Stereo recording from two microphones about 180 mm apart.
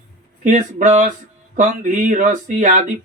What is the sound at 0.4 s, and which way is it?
Speech, 45° right (ahead or behind).